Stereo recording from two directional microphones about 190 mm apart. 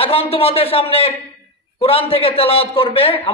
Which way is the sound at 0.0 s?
30° left (ahead or behind).